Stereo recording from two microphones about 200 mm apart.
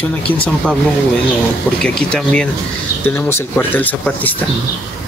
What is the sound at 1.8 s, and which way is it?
Speech, 5° left (ahead or behind).